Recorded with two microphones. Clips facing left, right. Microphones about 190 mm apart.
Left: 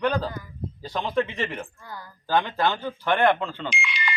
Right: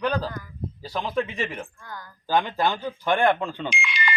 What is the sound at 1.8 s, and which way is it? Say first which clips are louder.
Speech: even; 10° left (ahead or behind).